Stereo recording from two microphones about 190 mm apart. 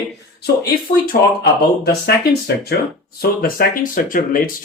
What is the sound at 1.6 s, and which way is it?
A man's voice, 55° left (ahead or behind).